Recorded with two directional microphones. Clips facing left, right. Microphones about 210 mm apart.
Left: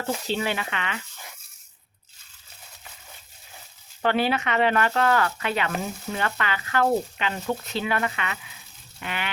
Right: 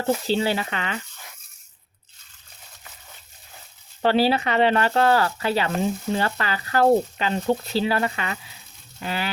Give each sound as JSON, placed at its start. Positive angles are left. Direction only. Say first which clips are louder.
{"t": 0.3, "sound": "speech", "louder": "right 4 dB", "side_deg": -35}
{"t": 4.0, "sound": "speech", "louder": "right 4 dB", "side_deg": -30}
{"t": 9.0, "sound": "coin", "louder": "right 4 dB", "side_deg": -35}